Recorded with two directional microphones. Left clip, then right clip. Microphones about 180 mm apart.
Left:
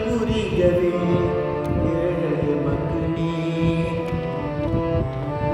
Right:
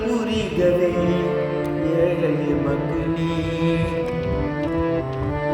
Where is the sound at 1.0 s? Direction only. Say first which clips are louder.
Right 1 dB; 30° right (ahead or behind).